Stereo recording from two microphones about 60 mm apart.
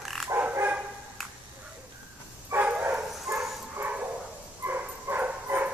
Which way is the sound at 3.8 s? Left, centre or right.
Right.